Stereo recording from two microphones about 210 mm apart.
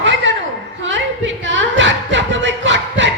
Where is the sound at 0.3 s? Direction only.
60° right (ahead or behind).